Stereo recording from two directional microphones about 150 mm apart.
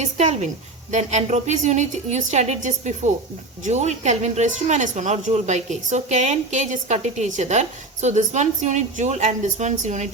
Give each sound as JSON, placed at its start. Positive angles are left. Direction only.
{"t": 0.0, "sound": "a woman's voice", "side_deg": -50}